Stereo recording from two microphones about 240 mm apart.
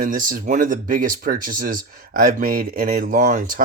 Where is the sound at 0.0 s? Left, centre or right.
Right.